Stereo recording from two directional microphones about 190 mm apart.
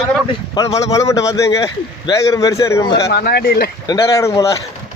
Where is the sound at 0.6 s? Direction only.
20° left (ahead or behind).